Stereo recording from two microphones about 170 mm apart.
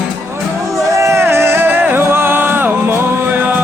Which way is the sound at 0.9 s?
15° right (ahead or behind).